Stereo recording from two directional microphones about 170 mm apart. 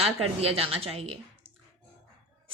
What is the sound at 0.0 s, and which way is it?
A woman's voice, 35° right (ahead or behind).